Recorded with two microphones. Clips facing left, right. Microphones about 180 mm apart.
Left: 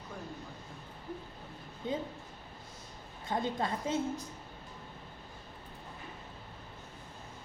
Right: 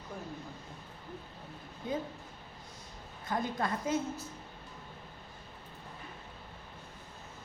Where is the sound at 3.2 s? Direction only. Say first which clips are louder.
Even; 25° left (ahead or behind).